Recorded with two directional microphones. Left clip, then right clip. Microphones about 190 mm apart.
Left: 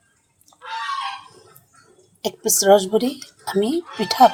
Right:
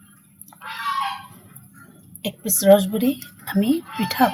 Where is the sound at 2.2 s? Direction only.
35° left (ahead or behind).